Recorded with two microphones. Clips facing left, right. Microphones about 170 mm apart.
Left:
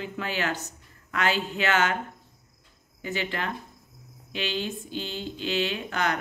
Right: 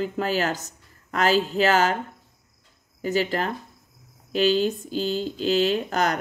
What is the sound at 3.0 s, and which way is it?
Speech, 40° right (ahead or behind).